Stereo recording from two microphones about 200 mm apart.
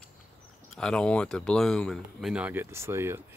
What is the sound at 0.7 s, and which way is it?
Speech, 5° left (ahead or behind).